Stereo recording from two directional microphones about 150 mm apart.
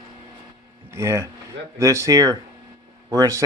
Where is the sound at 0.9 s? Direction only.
20° right (ahead or behind).